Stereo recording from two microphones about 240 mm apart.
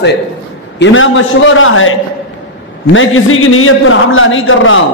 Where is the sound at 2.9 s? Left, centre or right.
Left.